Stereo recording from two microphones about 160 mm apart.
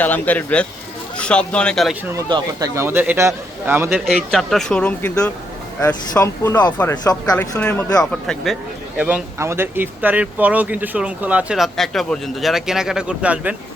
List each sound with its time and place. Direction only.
0.0 s speech: 10° left (ahead or behind)
2.1 s speech: 20° right (ahead or behind)
3.8 s speech: 5° right (ahead or behind); by 7.3 s 25° left (ahead or behind)
7.6 s speech: 10° left (ahead or behind)
9.0 s speech: 10° right (ahead or behind)